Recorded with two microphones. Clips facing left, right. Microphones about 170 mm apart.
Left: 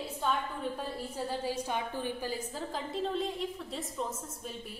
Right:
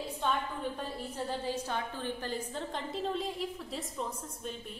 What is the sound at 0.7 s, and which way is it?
A woman's voice, 10° left (ahead or behind).